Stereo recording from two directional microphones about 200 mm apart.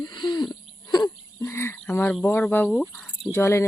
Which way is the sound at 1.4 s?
10° left (ahead or behind).